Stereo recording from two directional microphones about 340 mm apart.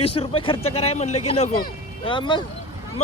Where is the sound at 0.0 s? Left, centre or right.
Centre.